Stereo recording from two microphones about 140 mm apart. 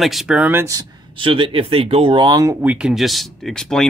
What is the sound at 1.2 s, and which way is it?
Speech, 40° right (ahead or behind).